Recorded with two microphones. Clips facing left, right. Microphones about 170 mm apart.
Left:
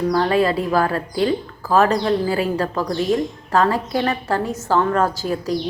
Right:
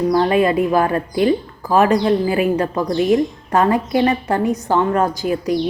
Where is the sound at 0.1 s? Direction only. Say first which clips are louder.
Right 2 dB; 15° right (ahead or behind).